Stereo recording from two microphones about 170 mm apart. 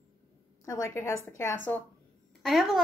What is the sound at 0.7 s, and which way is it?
Speech, 15° left (ahead or behind).